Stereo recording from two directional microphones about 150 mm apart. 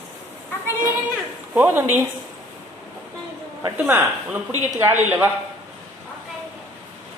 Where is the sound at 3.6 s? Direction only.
15° right (ahead or behind).